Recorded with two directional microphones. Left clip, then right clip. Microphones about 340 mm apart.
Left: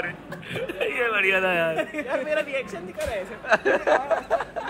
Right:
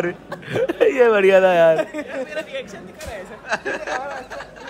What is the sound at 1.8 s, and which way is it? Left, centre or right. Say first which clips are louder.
Speech: right 2 dB; right.